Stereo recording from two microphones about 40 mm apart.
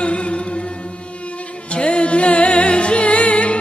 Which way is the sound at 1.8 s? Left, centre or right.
Left.